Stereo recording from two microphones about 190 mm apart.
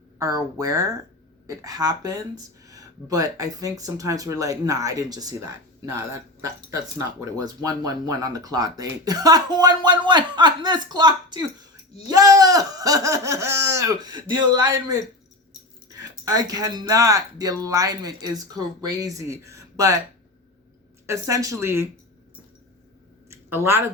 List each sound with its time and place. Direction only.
0.2 s speech: 20° right (ahead or behind)
7.3 s speech: 20° right (ahead or behind)
21.1 s speech: 15° right (ahead or behind)